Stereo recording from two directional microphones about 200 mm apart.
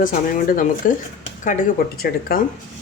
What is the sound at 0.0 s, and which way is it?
Speech, 45° left (ahead or behind).